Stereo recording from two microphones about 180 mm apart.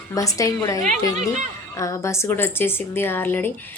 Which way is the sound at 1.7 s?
15° left (ahead or behind).